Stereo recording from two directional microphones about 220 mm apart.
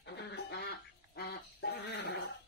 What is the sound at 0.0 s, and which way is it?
Duck, 50° left (ahead or behind).